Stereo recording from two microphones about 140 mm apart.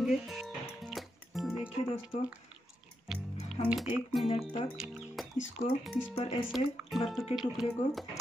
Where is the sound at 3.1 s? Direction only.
5° right (ahead or behind).